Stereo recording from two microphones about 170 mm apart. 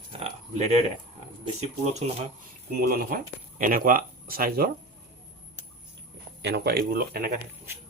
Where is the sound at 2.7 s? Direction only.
65° right (ahead or behind).